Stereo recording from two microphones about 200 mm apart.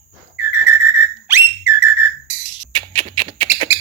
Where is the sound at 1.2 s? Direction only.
10° right (ahead or behind).